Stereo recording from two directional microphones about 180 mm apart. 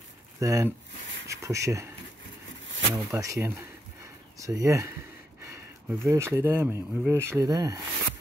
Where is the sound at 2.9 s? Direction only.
15° right (ahead or behind).